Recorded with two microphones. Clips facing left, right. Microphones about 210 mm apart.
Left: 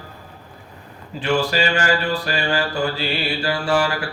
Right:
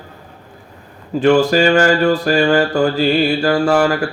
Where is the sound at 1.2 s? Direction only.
45° right (ahead or behind).